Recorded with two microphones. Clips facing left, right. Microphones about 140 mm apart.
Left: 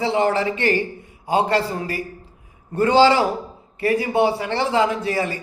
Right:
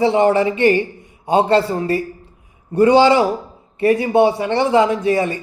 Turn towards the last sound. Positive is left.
turn(degrees=-25)  # may be behind; listen again after turning